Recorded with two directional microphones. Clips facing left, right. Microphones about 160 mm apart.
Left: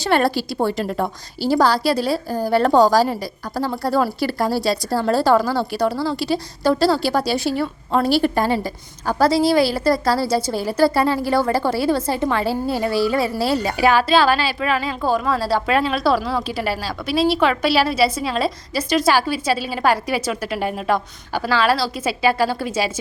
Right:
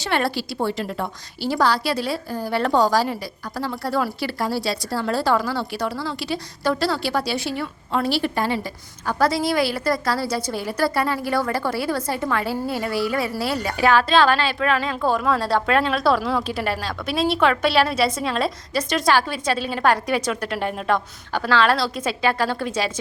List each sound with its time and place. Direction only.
0.0 s a woman's voice: 40° left (ahead or behind)
13.7 s a woman's voice: 10° left (ahead or behind)